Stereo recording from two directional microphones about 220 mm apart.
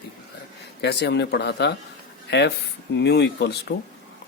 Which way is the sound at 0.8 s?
50° left (ahead or behind).